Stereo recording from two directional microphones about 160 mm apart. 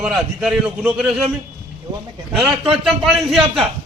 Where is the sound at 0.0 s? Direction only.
5° right (ahead or behind).